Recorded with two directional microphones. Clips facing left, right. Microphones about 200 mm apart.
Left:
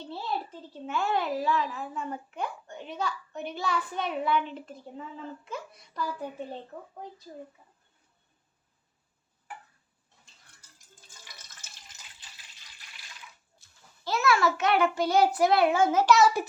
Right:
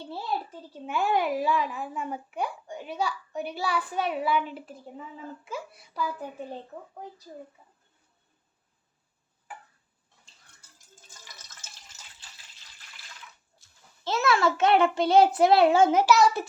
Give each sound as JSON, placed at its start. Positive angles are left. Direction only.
{"t": 0.9, "sound": "a child's voice", "side_deg": -15}
{"t": 14.0, "sound": "a child's voice", "side_deg": -25}
{"t": 16.0, "sound": "child singing", "side_deg": 0}